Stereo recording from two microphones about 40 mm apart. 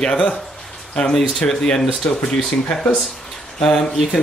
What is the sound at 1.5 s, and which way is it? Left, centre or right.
Speech, centre.